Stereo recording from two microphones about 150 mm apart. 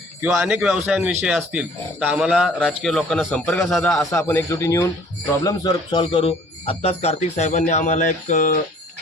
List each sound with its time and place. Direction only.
0.2 s speech: 15° right (ahead or behind)
0.4 s speech: 5° right (ahead or behind)
4.3 s a man's voice: 20° left (ahead or behind); by 8.6 s 60° left (ahead or behind)